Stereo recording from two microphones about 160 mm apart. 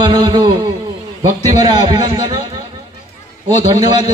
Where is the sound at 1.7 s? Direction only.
25° right (ahead or behind).